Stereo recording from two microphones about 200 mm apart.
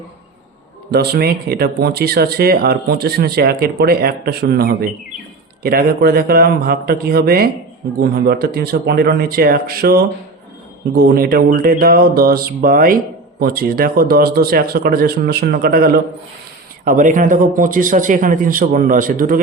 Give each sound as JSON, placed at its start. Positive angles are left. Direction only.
{"t": 0.9, "sound": "speech", "side_deg": -55}